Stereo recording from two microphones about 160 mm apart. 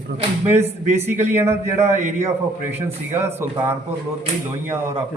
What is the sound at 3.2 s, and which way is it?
Speech, 15° right (ahead or behind).